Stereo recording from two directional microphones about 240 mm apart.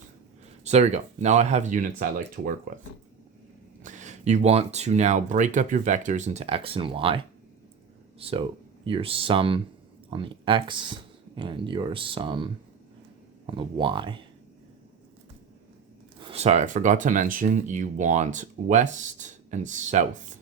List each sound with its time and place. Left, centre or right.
0.6 s speech: right
3.8 s speech: right
8.2 s speech: right
13.5 s speech: right
16.2 s speech: right